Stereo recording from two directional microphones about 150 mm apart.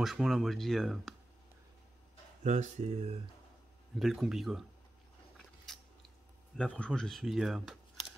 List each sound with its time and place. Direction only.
0.0 s speech: centre (ahead or behind)
2.4 s speech: 50° right (ahead or behind)
4.0 s speech: centre (ahead or behind)
5.7 s a sound: centre (ahead or behind)